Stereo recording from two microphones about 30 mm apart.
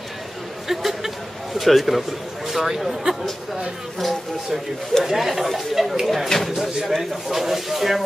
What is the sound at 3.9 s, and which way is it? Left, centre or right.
Speech, centre.